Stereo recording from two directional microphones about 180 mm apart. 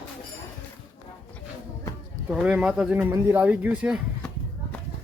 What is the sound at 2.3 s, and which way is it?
Speech, 5° right (ahead or behind).